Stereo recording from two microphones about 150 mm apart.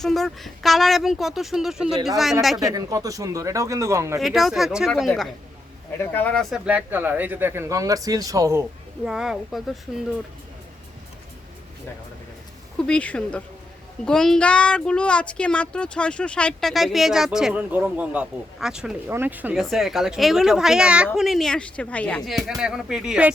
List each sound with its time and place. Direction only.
0.0 s speech: centre (ahead or behind)
2.7 s speech: 25° right (ahead or behind)
4.2 s speech: centre (ahead or behind)
6.7 s speech: 10° right (ahead or behind)
9.0 s speech: 5° right (ahead or behind)
12.9 s speech: 5° left (ahead or behind); by 19.6 s 10° right (ahead or behind)
19.6 s speech: centre (ahead or behind)